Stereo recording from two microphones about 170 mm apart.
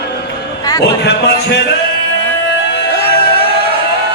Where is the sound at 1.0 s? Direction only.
85° left.